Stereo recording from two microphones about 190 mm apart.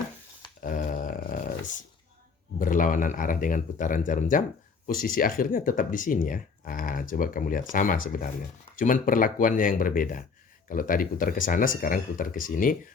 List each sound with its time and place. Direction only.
0.6 s wail: 45° left (ahead or behind)
2.6 s speech: 45° left (ahead or behind)